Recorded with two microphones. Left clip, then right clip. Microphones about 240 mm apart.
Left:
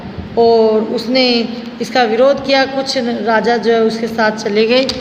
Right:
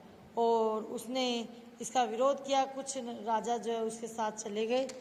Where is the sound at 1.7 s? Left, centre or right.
Right.